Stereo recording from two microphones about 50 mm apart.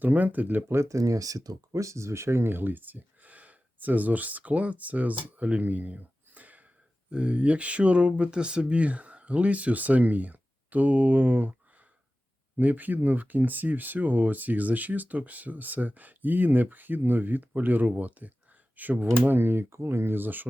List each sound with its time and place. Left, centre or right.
0.0 s speech: right
0.8 s speech: right
12.5 s speech: right
19.3 s speech: right
19.7 s speech: right